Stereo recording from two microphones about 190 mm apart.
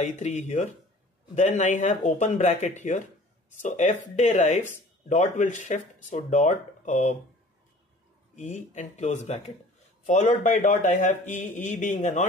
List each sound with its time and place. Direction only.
0.0 s speech: 40° left (ahead or behind)
8.4 s speech: 40° left (ahead or behind)